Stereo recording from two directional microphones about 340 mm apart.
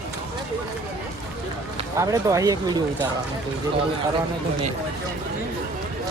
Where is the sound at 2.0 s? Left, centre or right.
Centre.